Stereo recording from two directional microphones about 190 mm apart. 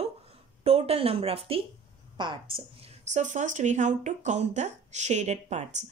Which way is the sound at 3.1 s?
40° right (ahead or behind).